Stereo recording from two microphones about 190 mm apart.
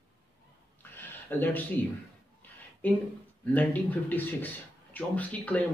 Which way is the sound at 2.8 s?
10° left (ahead or behind).